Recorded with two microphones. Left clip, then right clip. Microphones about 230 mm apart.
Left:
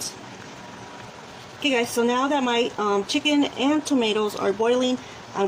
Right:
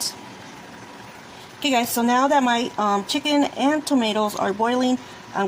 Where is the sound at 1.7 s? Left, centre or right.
Right.